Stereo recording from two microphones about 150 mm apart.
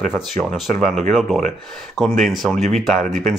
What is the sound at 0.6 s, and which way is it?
Speech, 5° left (ahead or behind).